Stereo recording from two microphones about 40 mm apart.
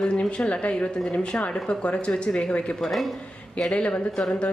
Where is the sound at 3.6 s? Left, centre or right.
Left.